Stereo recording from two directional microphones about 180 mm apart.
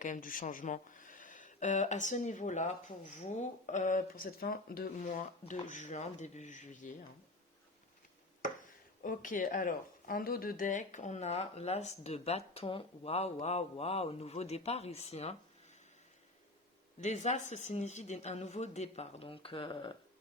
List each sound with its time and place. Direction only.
0.0 s speech: 45° left (ahead or behind)
9.0 s speech: 45° left (ahead or behind)
17.0 s speech: 40° left (ahead or behind)